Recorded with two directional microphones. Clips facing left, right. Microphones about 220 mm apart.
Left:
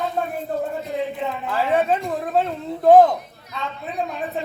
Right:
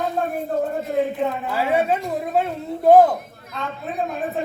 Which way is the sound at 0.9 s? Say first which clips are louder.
Right 5 dB; 50° right (ahead or behind).